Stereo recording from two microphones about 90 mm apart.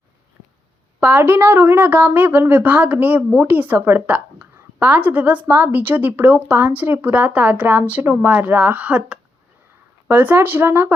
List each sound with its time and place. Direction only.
1.0 s a woman's voice: 25° right (ahead or behind)